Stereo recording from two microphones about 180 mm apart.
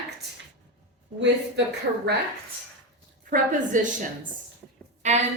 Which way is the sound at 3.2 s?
45° right (ahead or behind).